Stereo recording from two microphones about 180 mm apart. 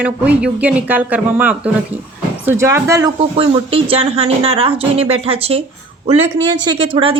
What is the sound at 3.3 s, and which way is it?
A woman's voice, 30° right (ahead or behind).